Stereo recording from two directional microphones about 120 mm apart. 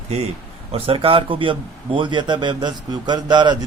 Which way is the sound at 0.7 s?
50° right (ahead or behind).